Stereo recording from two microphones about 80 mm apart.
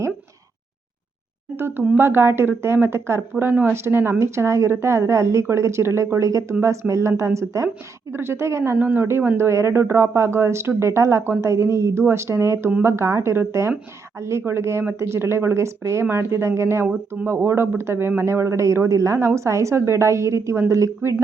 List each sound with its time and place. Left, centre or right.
1.5 s a woman's voice: right